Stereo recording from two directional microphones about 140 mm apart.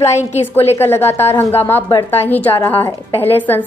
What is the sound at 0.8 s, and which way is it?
A woman's voice, 15° left (ahead or behind).